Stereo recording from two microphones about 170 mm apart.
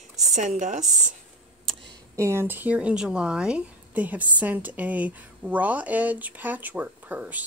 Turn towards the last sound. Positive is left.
turn(degrees=-10)  # may be behind; listen again after turning